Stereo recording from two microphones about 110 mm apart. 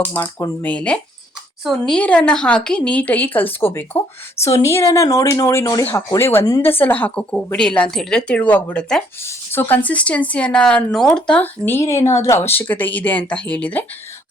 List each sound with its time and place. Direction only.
0.0 s speech: 15° left (ahead or behind)
9.2 s speech: 20° left (ahead or behind)